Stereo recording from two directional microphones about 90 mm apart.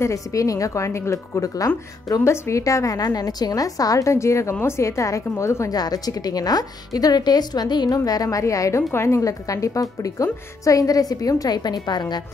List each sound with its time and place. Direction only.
0.0 s a woman's voice: 35° left (ahead or behind)
5.8 s a woman's voice: 45° left (ahead or behind)